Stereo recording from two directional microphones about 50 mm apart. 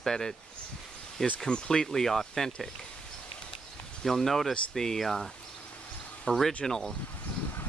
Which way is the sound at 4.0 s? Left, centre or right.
Centre.